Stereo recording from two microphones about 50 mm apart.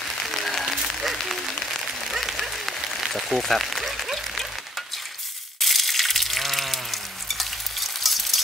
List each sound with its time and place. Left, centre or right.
0.3 s applause: centre
1.7 s a sound: centre
5.6 s frying: centre